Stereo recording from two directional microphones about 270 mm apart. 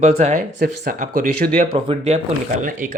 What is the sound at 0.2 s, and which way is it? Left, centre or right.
Speech, right.